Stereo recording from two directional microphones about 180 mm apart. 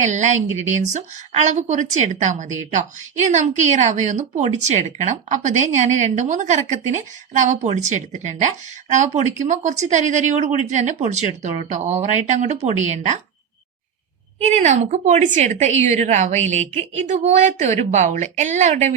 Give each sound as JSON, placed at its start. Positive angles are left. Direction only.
{"t": 0.0, "sound": "a woman's voice", "side_deg": -40}
{"t": 9.5, "sound": "a woman's voice", "side_deg": -40}
{"t": 14.3, "sound": "a woman's voice", "side_deg": -40}